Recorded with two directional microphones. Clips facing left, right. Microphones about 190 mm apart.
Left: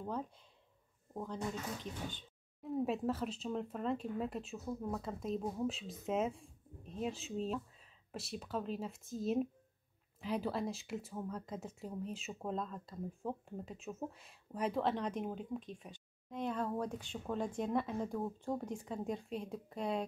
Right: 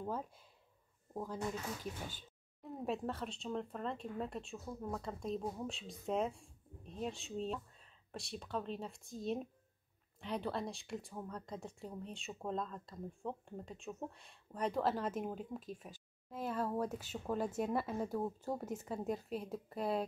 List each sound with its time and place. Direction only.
0.0 s speech: 5° right (ahead or behind)